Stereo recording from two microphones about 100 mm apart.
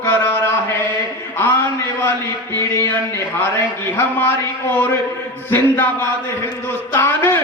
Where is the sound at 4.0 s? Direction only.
20° left (ahead or behind).